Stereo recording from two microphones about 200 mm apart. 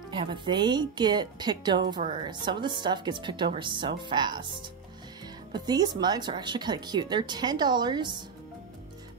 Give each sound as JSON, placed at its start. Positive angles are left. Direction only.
{"t": 0.1, "sound": "speech", "side_deg": -25}